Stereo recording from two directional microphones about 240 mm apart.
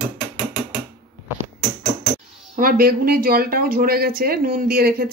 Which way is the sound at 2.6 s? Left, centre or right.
Right.